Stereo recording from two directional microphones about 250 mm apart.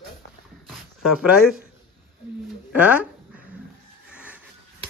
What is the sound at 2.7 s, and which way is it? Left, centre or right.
Speech, centre.